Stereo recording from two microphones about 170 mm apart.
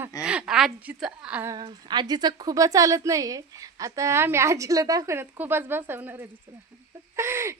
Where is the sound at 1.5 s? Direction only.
25° right (ahead or behind).